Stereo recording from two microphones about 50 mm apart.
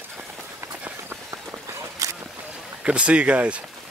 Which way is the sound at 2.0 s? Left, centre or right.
Right.